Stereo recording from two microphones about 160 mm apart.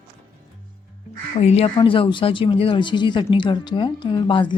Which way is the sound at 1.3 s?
40° left (ahead or behind).